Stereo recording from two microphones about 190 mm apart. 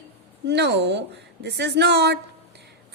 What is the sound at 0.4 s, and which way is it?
Speech, 65° right (ahead or behind).